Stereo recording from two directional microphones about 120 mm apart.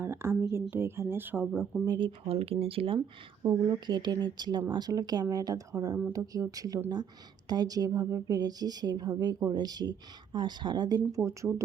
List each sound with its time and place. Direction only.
0.0 s speech: 20° right (ahead or behind)
2.0 s speech: 50° right (ahead or behind)
3.4 s speech: 35° right (ahead or behind)
11.1 s speech: 25° right (ahead or behind)